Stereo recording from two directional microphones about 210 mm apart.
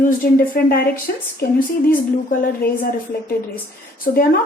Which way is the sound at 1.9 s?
45° left (ahead or behind).